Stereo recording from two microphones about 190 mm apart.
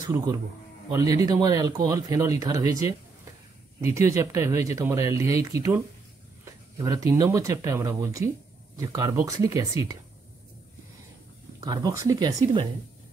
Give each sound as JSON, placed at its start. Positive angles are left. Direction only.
{"t": 0.0, "sound": "speech", "side_deg": -20}
{"t": 11.6, "sound": "speech", "side_deg": -20}